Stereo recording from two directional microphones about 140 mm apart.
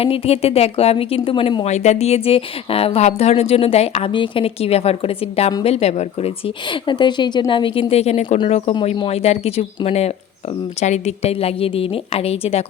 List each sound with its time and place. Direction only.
0.0 s a woman's voice: 45° left (ahead or behind)
6.7 s a woman's voice: 35° left (ahead or behind)